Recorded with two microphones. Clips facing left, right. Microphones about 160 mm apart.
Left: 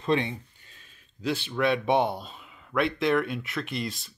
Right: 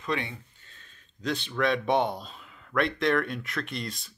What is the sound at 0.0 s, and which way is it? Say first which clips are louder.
Speech: left 6 dB; 25° left (ahead or behind).